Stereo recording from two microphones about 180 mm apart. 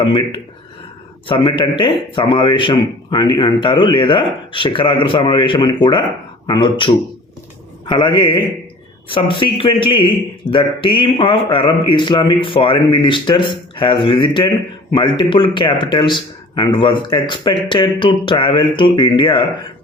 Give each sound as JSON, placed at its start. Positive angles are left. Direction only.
{"t": 0.0, "sound": "a man's voice", "side_deg": 30}